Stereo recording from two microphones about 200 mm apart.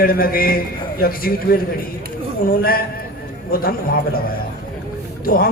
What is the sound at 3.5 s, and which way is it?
Speech, 45° left (ahead or behind).